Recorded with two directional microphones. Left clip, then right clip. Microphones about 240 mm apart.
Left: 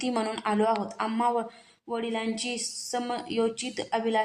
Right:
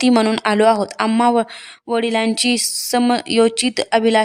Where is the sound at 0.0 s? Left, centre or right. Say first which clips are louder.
Right 13 dB; right.